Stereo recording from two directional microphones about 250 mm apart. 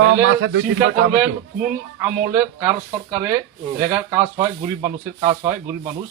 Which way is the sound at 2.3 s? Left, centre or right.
Centre.